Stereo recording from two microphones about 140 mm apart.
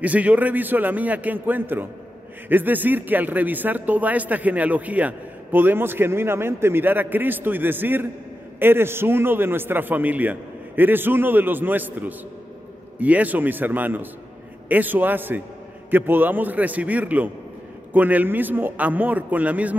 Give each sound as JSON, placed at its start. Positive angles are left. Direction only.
{"t": 0.0, "sound": "speech", "side_deg": -10}